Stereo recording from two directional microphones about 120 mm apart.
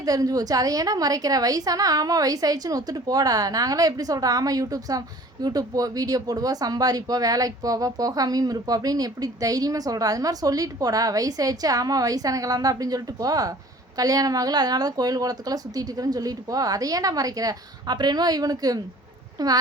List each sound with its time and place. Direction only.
0.0 s a woman's voice: 30° right (ahead or behind)